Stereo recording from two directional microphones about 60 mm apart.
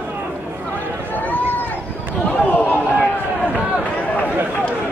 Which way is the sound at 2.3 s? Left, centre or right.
Left.